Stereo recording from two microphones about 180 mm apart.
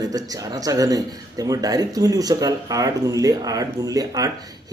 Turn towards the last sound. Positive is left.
turn(degrees=-20)  # may be behind; listen again after turning